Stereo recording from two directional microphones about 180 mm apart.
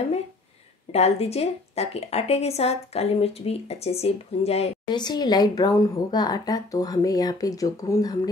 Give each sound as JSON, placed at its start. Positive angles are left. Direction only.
{"t": 0.9, "sound": "a woman's voice", "side_deg": 35}